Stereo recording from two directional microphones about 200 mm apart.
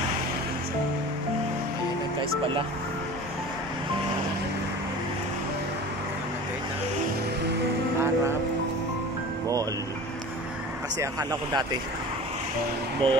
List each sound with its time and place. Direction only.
11.0 s speech: 20° right (ahead or behind)
13.0 s speech: 25° right (ahead or behind)